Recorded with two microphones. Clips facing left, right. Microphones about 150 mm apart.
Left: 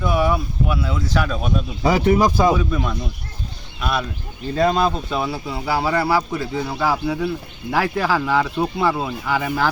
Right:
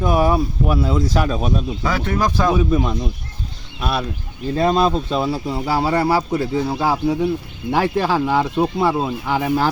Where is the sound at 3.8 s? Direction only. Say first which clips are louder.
Right 1 dB; 35° right (ahead or behind).